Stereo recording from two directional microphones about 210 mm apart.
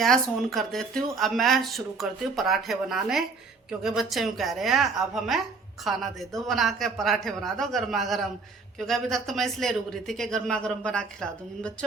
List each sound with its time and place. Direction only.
0.0 s speech: centre (ahead or behind)